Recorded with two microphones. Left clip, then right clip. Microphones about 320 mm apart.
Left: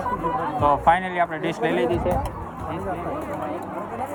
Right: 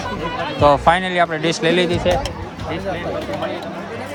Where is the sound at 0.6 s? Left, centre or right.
Centre.